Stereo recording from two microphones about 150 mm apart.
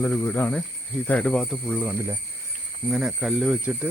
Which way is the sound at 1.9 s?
20° right (ahead or behind).